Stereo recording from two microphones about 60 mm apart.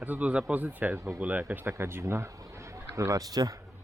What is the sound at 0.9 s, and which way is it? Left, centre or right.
Speech, right.